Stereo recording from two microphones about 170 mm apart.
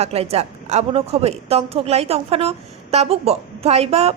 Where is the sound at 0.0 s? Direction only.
35° right (ahead or behind).